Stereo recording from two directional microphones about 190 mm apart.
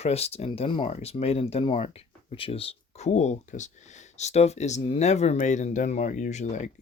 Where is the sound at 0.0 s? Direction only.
35° left (ahead or behind).